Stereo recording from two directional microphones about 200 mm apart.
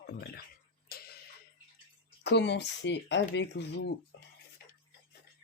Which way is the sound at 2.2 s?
60° left (ahead or behind).